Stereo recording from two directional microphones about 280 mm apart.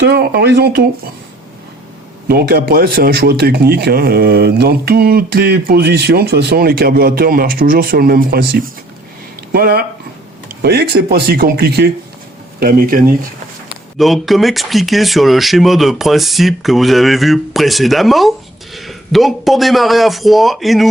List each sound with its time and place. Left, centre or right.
0.1 s speech: right
2.2 s speech: right
14.0 s speech: centre